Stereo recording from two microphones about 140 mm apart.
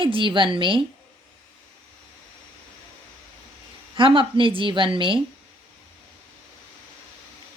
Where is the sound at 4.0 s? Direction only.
35° right (ahead or behind).